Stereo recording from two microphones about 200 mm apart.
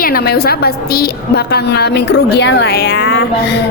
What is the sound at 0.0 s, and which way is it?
A woman's voice, 50° left (ahead or behind).